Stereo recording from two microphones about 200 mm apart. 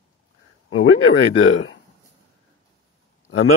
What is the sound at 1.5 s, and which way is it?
Speech, 90° left.